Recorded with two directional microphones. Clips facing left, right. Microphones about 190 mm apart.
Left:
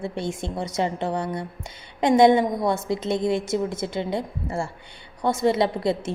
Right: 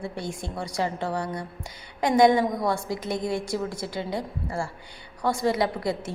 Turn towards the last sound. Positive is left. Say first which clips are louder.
# left 4 dB
turn(degrees=25)  # may be behind; listen again after turning